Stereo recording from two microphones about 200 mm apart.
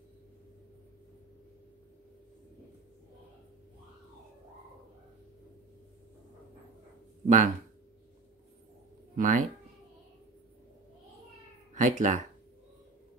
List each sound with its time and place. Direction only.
7.2 s speech: 35° right (ahead or behind)
9.1 s speech: 40° right (ahead or behind)
11.7 s speech: 40° right (ahead or behind)